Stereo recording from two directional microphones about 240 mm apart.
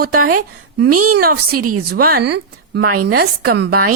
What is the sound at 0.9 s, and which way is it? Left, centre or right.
Speech, right.